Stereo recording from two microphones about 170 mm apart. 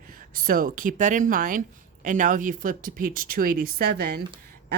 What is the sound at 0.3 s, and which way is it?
Speech, 55° right (ahead or behind).